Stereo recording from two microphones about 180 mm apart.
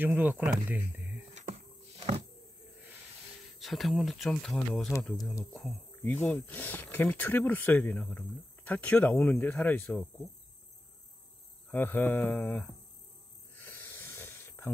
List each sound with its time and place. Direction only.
0.0 s speech: 10° right (ahead or behind)
1.3 s a sound: 40° right (ahead or behind)
3.5 s speech: centre (ahead or behind)
11.7 s speech: 10° left (ahead or behind)
13.6 s snake: 10° left (ahead or behind)